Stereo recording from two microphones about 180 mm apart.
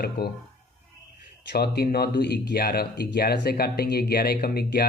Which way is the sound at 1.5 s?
60° left (ahead or behind).